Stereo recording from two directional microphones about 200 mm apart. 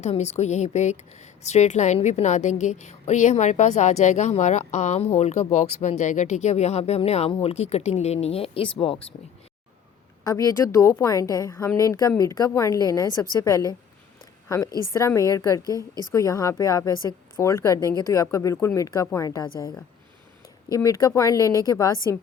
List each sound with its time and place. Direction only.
0.0 s a woman's voice: 35° left (ahead or behind)
10.2 s a woman's voice: 15° left (ahead or behind)